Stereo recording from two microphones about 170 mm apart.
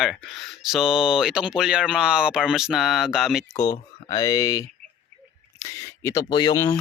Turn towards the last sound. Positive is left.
turn(degrees=20)  # may be behind; listen again after turning